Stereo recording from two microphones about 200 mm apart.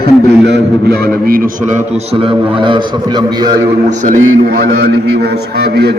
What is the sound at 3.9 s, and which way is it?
A man's voice, 40° right (ahead or behind).